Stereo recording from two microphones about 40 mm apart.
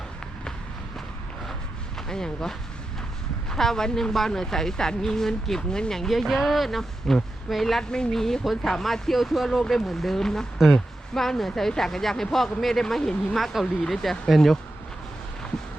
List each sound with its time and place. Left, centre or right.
2.0 s speech: centre
7.8 s a woman's voice: centre